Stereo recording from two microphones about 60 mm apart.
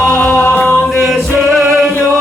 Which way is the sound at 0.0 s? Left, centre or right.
Left.